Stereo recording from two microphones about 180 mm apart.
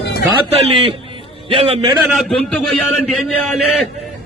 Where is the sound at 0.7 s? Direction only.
30° right (ahead or behind).